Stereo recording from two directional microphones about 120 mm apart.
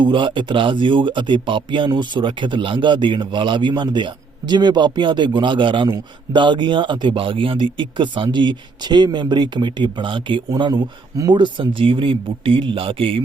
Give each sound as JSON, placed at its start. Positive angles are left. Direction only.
{"t": 0.0, "sound": "speech", "side_deg": -40}
{"t": 10.5, "sound": "speech", "side_deg": -35}